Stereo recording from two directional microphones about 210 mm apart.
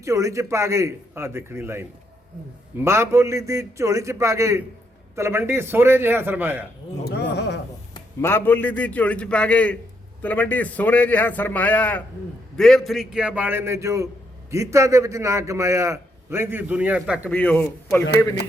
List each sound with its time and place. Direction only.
0.0 s a man's voice: 15° right (ahead or behind)
7.0 s speech: 50° left (ahead or behind)
7.9 s a man's voice: 10° left (ahead or behind); by 17.2 s 5° right (ahead or behind)
17.2 s a man's voice: 5° left (ahead or behind)